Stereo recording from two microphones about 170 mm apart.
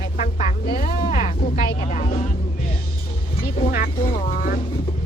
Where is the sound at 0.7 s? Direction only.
55° left (ahead or behind).